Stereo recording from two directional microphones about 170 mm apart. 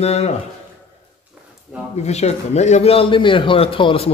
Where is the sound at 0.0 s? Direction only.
40° left (ahead or behind).